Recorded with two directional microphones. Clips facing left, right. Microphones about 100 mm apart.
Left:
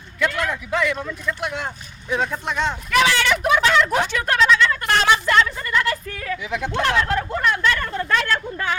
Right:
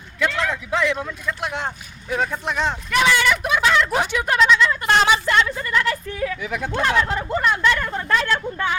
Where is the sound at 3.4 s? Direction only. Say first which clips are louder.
Left 2 dB; centre (ahead or behind).